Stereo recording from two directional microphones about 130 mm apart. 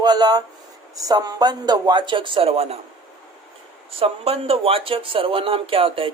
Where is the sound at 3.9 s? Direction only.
50° right (ahead or behind).